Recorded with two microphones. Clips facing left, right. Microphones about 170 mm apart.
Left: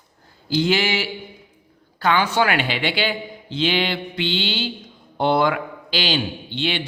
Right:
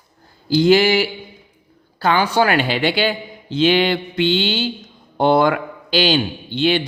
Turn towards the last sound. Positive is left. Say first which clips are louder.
# right 7 dB
turn(degrees=-45)  # may be behind; listen again after turning